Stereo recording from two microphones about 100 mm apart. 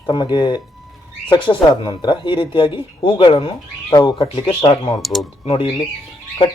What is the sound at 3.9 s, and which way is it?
Speech, 50° left (ahead or behind).